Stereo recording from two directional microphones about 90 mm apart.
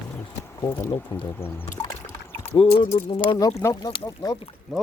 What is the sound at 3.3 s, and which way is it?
Speech, 35° left (ahead or behind).